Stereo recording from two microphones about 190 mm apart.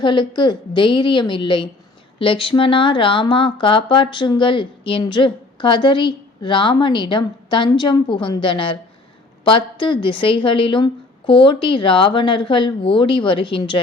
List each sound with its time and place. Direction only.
0.0 s speech: 25° left (ahead or behind)